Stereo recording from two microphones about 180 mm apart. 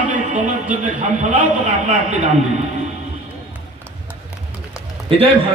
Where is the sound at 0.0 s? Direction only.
45° right (ahead or behind).